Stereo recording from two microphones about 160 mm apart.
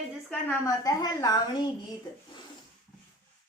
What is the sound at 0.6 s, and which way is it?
Speech, 20° left (ahead or behind).